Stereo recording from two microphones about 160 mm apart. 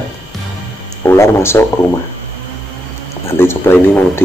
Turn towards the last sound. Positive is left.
turn(degrees=10)  # may be behind; listen again after turning